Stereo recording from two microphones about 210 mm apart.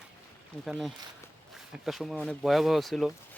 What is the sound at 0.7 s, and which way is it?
Speech, centre (ahead or behind).